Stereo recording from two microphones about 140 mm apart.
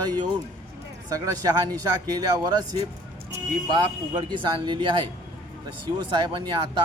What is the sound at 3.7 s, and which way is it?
Speech, 35° right (ahead or behind).